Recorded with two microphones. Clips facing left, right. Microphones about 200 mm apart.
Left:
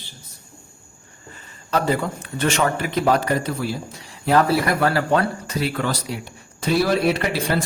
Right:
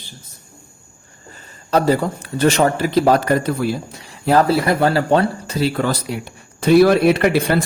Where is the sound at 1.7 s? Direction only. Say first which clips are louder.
Right 5 dB; 35° right (ahead or behind).